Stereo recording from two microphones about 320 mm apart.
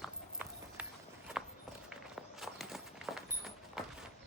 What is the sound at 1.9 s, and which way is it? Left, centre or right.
Walk, centre.